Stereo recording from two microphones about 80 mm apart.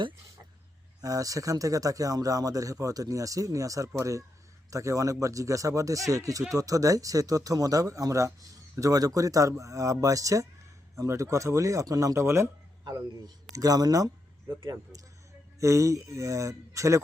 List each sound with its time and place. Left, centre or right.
1.0 s speech: right
12.8 s a man's voice: right